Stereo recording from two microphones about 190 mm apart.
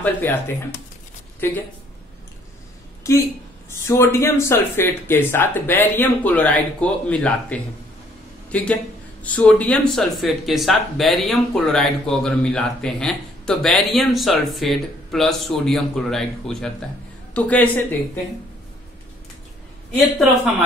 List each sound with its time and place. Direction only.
0.0 s speech: 10° left (ahead or behind)
1.4 s speech: 10° left (ahead or behind)
3.1 s speech: 15° left (ahead or behind)